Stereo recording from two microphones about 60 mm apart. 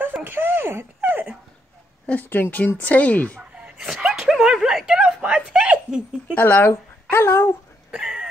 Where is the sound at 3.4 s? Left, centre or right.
Centre.